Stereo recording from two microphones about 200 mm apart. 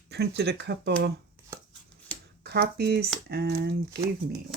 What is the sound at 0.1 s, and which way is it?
Speech, 55° right (ahead or behind).